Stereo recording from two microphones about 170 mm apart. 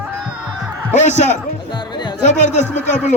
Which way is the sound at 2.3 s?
45° left (ahead or behind).